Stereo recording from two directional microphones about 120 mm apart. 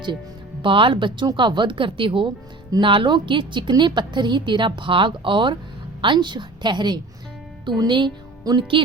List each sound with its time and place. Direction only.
0.6 s a woman's voice: 45° right (ahead or behind)